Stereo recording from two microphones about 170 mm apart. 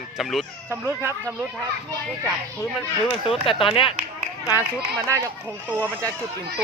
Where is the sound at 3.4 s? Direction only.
Centre (ahead or behind).